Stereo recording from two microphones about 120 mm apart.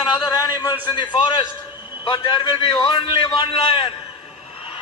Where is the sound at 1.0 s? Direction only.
40° left (ahead or behind).